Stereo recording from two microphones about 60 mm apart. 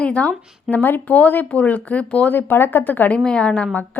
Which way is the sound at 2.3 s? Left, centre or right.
Left.